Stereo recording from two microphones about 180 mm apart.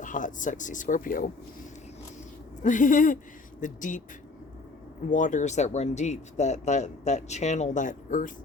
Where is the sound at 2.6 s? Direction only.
45° left (ahead or behind).